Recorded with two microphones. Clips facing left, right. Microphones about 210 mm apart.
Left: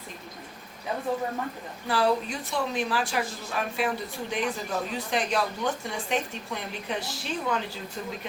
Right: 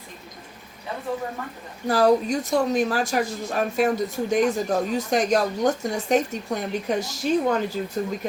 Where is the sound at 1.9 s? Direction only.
45° right (ahead or behind).